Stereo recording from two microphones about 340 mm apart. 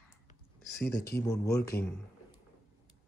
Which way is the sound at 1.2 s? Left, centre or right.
Centre.